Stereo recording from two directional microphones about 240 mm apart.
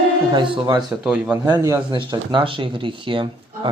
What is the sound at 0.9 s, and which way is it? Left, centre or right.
Speech, centre.